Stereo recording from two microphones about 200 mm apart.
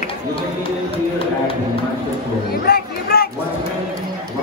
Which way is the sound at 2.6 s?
50° left (ahead or behind).